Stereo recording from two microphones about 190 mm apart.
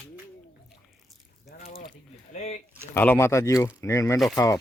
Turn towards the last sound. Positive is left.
turn(degrees=15)  # may be behind; listen again after turning